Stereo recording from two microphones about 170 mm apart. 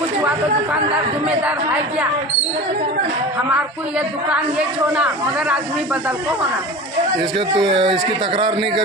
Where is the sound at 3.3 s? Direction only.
10° right (ahead or behind).